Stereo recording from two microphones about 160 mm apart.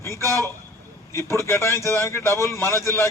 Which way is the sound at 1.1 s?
15° left (ahead or behind).